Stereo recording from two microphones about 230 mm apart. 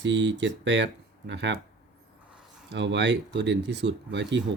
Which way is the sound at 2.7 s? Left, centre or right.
Right.